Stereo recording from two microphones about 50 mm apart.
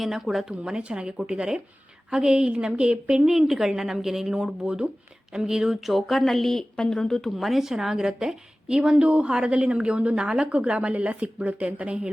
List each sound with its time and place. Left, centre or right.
0.0 s a woman's voice: centre
7.3 s a woman's voice: centre; by 12.1 s right